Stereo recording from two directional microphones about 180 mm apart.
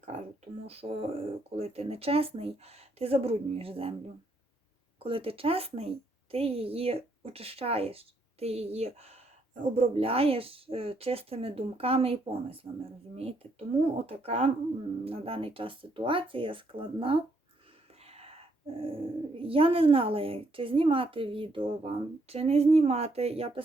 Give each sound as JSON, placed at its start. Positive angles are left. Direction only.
{"t": 0.7, "sound": "speech", "side_deg": -35}
{"t": 5.0, "sound": "speech", "side_deg": -30}